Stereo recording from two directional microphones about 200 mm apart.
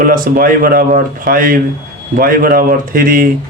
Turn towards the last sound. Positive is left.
turn(degrees=-45)  # may be behind; listen again after turning